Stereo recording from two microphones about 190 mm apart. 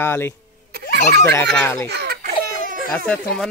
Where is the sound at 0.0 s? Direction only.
10° left (ahead or behind).